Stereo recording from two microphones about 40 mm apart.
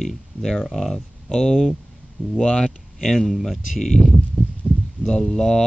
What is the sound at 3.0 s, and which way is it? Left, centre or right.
Speech, centre.